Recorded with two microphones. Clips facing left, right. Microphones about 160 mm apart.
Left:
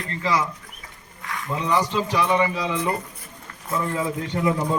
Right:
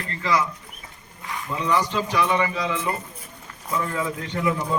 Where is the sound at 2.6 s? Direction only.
30° left (ahead or behind).